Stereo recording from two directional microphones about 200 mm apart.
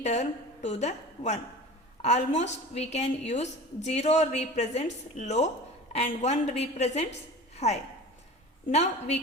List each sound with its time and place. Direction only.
0.0 s a woman's voice: 35° left (ahead or behind)
7.5 s a sound: 35° left (ahead or behind)
8.7 s a woman's voice: 35° left (ahead or behind)